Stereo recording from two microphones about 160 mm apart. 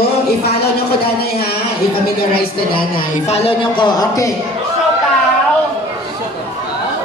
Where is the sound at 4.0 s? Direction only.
20° left (ahead or behind).